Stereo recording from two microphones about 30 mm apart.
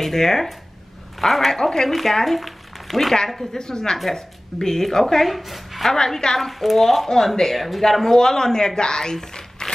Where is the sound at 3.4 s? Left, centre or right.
Left; by 7.8 s centre.